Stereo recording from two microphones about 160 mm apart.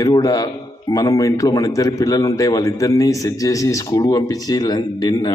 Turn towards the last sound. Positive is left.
turn(degrees=25)  # may be behind; listen again after turning